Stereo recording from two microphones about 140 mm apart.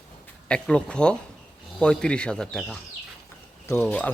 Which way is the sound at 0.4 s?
10° left (ahead or behind).